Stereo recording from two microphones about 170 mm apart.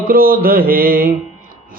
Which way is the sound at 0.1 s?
60° right (ahead or behind).